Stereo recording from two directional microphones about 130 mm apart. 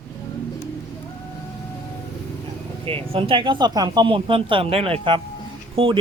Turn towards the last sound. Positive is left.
turn(degrees=-45)  # may be behind; listen again after turning